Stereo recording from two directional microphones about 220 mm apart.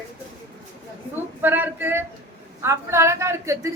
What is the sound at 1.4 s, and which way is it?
A woman's voice, 10° right (ahead or behind).